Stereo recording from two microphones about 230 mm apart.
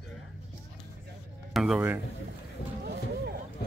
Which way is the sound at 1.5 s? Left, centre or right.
Centre.